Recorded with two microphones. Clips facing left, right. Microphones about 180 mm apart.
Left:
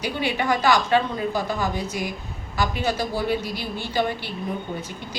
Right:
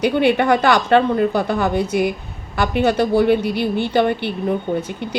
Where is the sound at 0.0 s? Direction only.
60° right (ahead or behind).